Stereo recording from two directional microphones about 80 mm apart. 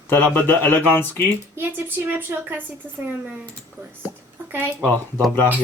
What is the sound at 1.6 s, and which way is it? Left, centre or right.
Speech, right.